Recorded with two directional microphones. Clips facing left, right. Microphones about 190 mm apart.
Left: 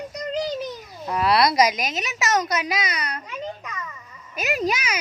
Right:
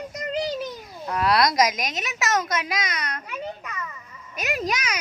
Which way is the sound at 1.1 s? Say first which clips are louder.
Left 1 dB; 5° left (ahead or behind).